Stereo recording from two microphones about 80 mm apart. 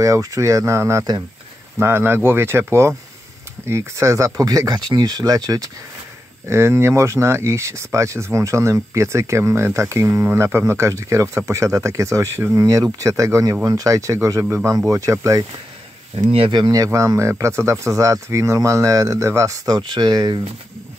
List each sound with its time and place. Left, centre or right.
0.0 s speech: right
6.4 s speech: right
16.2 s speech: right
16.8 s speech: right
19.8 s speech: right